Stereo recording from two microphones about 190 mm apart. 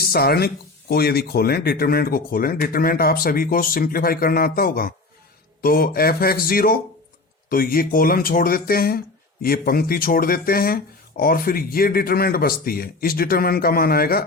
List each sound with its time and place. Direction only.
0.0 s speech: 55° left (ahead or behind)